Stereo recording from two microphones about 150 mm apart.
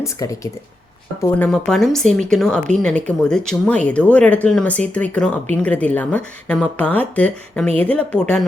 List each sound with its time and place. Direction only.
0.0 s speech: 20° left (ahead or behind)
1.5 s speech: 5° left (ahead or behind)